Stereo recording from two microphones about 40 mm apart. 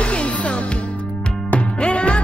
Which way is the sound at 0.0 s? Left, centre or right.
Left.